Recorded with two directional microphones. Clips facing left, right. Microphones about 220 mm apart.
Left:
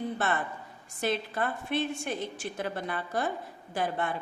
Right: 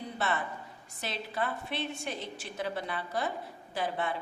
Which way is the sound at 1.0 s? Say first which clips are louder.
Left 5 dB; 50° left (ahead or behind).